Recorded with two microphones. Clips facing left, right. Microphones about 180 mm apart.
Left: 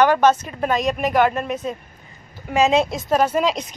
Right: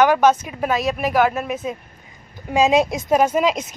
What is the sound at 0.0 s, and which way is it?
Speech, 10° right (ahead or behind).